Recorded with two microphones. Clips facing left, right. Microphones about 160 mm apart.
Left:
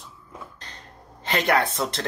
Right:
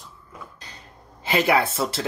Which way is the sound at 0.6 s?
10° right (ahead or behind).